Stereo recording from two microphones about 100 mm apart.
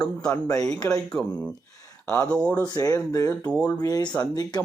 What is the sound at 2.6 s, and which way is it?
Speech, 35° left (ahead or behind).